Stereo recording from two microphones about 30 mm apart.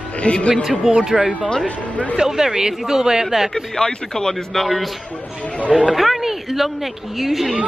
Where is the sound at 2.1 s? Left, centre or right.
Centre.